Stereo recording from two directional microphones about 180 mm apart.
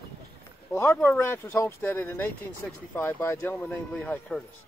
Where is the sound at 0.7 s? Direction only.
15° left (ahead or behind).